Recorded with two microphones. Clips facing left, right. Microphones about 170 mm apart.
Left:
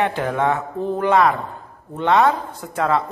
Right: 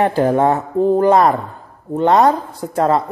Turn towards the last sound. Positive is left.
turn(degrees=-35)  # may be behind; listen again after turning